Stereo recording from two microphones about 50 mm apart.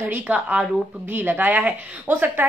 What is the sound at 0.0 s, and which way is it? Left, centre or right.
A woman's voice, right.